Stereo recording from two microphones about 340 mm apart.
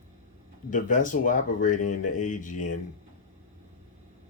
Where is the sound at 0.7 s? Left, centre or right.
Left.